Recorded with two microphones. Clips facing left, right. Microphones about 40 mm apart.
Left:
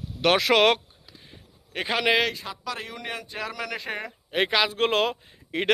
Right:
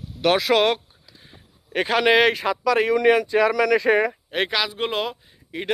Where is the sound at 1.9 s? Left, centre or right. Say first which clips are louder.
Right 5 dB; centre.